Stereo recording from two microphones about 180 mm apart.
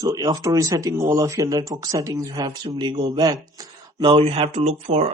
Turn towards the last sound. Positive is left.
turn(degrees=-35)  # may be behind; listen again after turning